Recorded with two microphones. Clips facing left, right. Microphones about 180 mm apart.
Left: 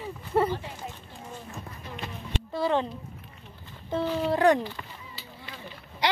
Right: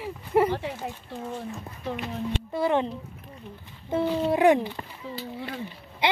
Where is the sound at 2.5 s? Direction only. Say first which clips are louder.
Right 1 dB; 20° right (ahead or behind).